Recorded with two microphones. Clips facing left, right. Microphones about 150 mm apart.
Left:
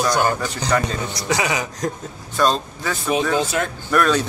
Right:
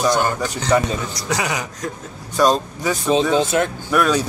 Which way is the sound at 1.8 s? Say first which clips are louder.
Left 6 dB; 35° left (ahead or behind).